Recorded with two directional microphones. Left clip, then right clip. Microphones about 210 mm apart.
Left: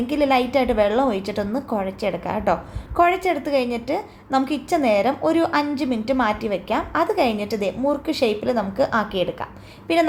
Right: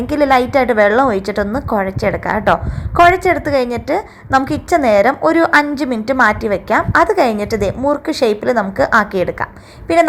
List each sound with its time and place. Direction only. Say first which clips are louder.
0.1 s a woman's voice: right 7 dB; 20° right (ahead or behind)